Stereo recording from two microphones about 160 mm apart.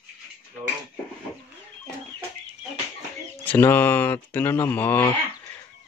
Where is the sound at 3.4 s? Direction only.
10° left (ahead or behind).